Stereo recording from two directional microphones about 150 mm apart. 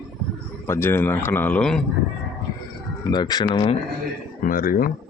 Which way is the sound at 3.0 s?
30° left (ahead or behind).